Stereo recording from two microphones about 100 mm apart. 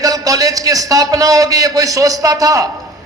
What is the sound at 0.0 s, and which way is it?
A man's voice, 35° right (ahead or behind).